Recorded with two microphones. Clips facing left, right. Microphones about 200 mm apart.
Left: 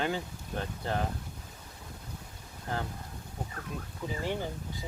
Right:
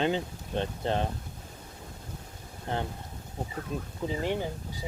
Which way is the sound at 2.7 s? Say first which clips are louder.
Right 3 dB; 30° right (ahead or behind).